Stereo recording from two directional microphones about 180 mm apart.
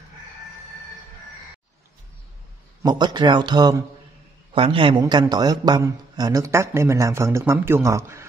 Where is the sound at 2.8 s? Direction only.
25° right (ahead or behind).